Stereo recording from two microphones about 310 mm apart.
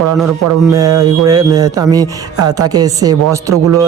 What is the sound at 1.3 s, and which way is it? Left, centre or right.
Speech, centre.